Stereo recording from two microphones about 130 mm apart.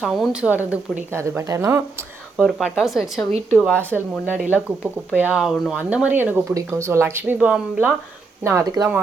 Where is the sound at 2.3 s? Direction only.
Centre (ahead or behind).